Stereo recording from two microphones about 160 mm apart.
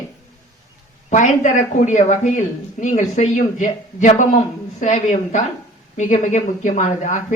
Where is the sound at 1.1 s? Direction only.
50° left (ahead or behind).